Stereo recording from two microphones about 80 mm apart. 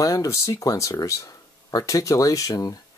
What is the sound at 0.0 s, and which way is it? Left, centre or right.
Speech, left.